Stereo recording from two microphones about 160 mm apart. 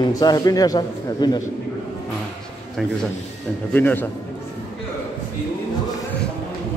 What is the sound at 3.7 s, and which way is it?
Speech, 10° left (ahead or behind).